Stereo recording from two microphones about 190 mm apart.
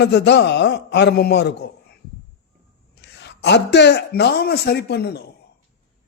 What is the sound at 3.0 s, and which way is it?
A man's voice, 65° left (ahead or behind).